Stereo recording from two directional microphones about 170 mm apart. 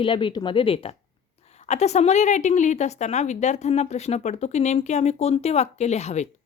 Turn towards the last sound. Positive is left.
turn(degrees=40)  # may be behind; listen again after turning